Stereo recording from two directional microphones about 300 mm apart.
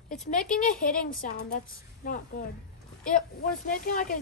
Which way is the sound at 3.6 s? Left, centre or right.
Left.